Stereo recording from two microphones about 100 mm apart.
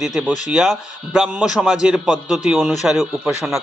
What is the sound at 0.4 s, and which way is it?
Speech, centre (ahead or behind).